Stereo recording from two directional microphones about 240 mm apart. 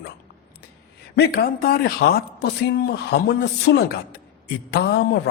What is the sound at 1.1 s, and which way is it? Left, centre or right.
A man's voice, left.